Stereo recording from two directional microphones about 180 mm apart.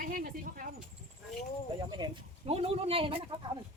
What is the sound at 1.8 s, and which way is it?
Speech, 25° right (ahead or behind).